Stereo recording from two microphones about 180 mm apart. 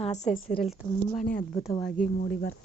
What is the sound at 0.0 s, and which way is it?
Speech, 35° left (ahead or behind).